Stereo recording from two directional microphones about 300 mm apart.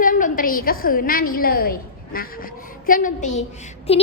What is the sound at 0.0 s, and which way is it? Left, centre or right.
A woman's voice, left.